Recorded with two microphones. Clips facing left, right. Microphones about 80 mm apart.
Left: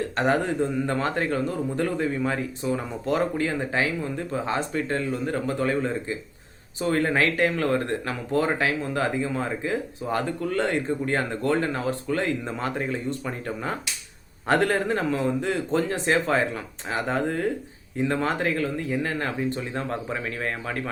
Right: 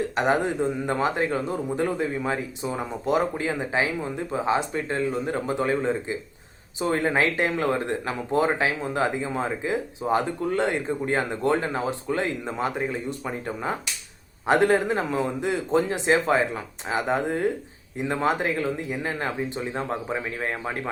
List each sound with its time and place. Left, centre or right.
0.2 s speech: centre